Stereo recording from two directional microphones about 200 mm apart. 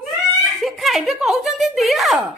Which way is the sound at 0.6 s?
Centre (ahead or behind).